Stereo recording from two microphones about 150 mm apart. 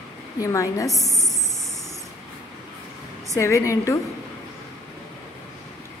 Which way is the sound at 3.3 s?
20° left (ahead or behind).